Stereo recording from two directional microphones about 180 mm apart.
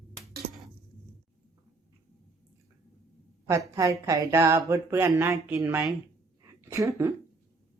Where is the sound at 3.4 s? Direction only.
15° right (ahead or behind).